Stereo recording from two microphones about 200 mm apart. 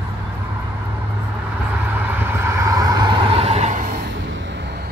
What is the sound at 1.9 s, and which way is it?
Vehicle, 10° right (ahead or behind).